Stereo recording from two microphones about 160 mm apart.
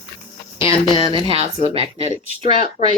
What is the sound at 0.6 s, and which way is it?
Speech, 35° left (ahead or behind).